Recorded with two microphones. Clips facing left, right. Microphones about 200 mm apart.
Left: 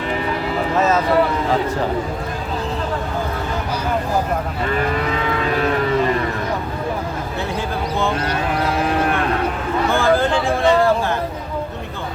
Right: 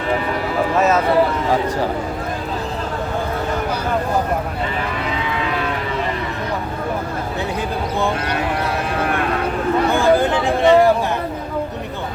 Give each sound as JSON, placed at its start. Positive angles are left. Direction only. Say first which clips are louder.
{"t": 9.9, "sound": "speech", "louder": "even", "side_deg": -20}